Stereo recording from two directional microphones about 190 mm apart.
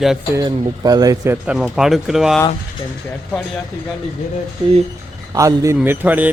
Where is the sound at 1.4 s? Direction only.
5° right (ahead or behind).